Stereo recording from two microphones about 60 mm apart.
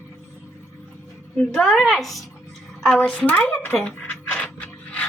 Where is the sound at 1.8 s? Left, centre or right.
Centre.